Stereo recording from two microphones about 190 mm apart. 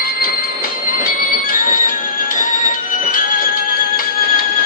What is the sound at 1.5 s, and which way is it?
Music, 45° left (ahead or behind).